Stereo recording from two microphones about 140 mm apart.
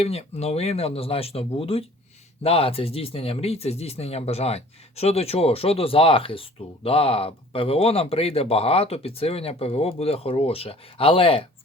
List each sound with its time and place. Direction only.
0.0 s speech: 50° left (ahead or behind)